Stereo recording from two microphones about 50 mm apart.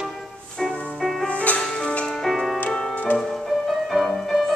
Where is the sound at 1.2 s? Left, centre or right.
Left.